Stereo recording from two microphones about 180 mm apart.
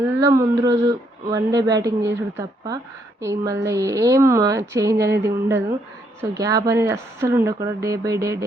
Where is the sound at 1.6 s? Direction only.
20° right (ahead or behind).